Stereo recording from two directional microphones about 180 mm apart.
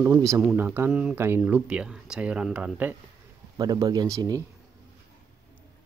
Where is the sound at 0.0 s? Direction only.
15° right (ahead or behind).